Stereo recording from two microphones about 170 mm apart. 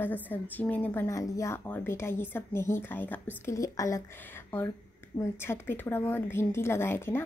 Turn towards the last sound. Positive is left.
turn(degrees=15)  # may be behind; listen again after turning